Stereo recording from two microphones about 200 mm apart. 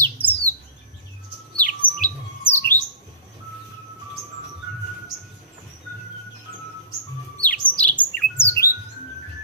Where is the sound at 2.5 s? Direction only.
10° left (ahead or behind).